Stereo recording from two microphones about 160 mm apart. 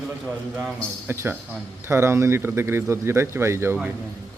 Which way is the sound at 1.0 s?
15° right (ahead or behind).